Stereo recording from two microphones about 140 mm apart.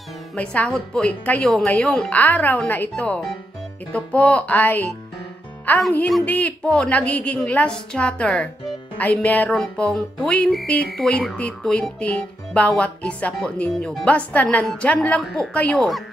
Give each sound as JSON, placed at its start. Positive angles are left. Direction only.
{"t": 0.3, "sound": "speech", "side_deg": 10}